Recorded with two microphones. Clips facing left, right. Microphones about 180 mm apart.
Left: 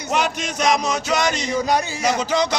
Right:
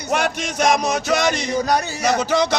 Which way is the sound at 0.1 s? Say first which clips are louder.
Right 1 dB; 50° right (ahead or behind).